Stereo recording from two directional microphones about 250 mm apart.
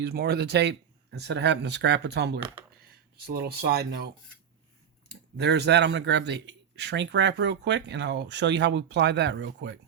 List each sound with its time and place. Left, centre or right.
0.0 s speech: right